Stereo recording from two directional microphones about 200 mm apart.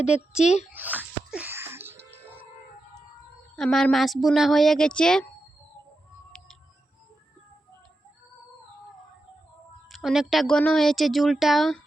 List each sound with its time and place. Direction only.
0.4 s a child's voice: 35° left (ahead or behind)
0.7 s music: 10° right (ahead or behind)
3.5 s speech: centre (ahead or behind)
9.9 s speech: centre (ahead or behind)